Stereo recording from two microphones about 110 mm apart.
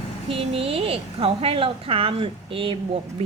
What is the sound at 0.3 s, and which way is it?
Speech, 60° right (ahead or behind).